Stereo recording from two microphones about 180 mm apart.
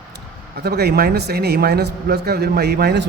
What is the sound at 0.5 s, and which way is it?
A man's voice, 65° right (ahead or behind).